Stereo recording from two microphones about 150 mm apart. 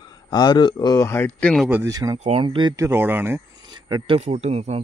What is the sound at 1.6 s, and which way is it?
Speech, 10° right (ahead or behind).